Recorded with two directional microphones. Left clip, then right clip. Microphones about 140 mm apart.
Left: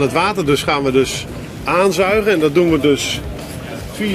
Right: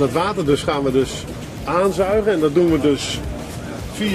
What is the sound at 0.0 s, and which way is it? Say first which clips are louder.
Speech: left 3 dB; 30° left (ahead or behind).